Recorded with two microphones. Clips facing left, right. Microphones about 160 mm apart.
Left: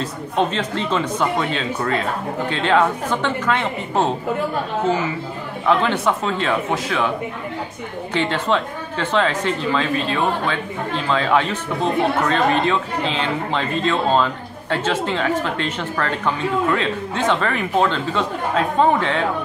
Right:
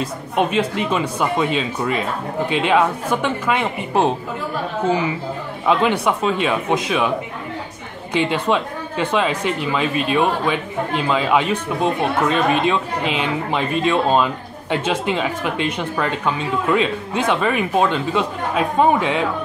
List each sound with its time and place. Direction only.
0.0 s speech: 10° right (ahead or behind)
5.7 s speech: 15° right (ahead or behind)
8.1 s speech: 15° right (ahead or behind)